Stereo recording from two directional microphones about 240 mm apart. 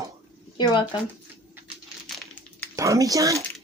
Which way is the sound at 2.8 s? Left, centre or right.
Centre.